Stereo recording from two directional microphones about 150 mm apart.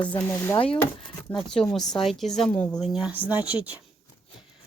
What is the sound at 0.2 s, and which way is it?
Speech, 15° left (ahead or behind).